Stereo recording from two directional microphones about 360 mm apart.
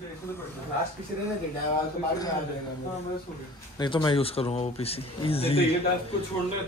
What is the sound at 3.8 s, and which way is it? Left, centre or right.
A man's voice, centre.